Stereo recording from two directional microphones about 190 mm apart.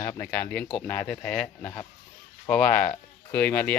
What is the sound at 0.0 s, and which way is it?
Speech, 10° left (ahead or behind).